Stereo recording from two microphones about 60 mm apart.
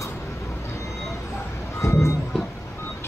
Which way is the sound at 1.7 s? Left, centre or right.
Left.